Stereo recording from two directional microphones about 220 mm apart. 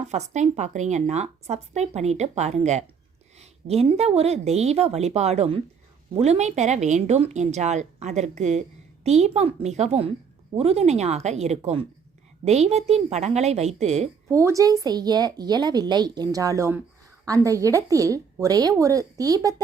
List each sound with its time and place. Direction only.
0.0 s a woman's voice: 30° right (ahead or behind)
14.3 s a woman's voice: 15° right (ahead or behind)